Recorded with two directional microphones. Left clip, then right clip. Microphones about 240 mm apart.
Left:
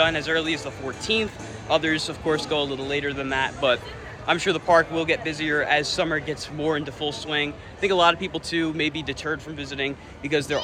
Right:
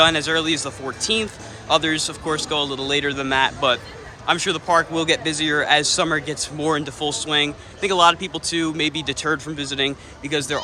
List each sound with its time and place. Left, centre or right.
0.0 s speech: centre